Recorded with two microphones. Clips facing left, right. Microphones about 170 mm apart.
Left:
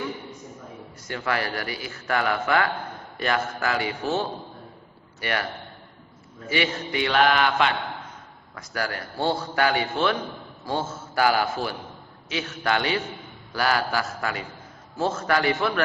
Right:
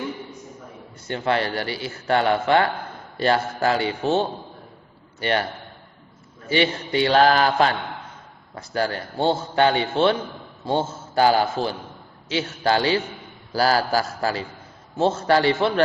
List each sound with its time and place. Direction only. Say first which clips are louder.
1.0 s a man's voice: right 5 dB; 25° right (ahead or behind)
6.5 s a man's voice: right 5 dB; 30° right (ahead or behind)